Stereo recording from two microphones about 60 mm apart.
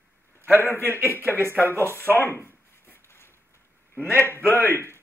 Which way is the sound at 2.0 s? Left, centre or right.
Left.